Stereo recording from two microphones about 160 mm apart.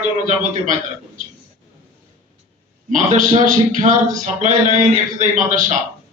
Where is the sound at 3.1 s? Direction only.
55° right (ahead or behind).